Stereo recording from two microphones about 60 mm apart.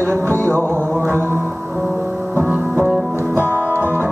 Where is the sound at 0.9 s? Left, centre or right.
Right.